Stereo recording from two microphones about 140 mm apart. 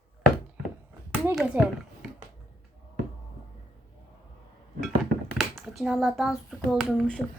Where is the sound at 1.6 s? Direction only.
10° right (ahead or behind).